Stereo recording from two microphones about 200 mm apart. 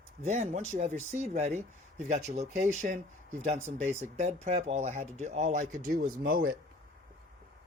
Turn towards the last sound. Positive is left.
turn(degrees=-45)  # may be behind; listen again after turning